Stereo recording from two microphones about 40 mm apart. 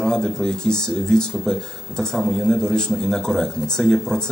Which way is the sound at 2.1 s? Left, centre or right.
Centre.